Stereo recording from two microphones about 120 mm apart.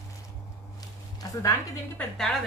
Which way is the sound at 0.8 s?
30° left (ahead or behind).